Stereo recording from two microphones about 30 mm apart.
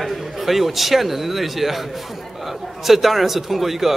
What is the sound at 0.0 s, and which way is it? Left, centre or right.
A man's voice, centre.